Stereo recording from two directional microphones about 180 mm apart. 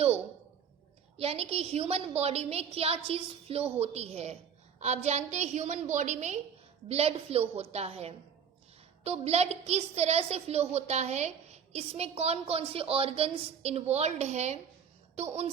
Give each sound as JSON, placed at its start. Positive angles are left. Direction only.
{"t": 1.1, "sound": "a woman's voice", "side_deg": -35}